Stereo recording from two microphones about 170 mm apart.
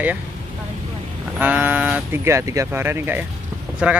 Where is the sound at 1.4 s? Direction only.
10° right (ahead or behind).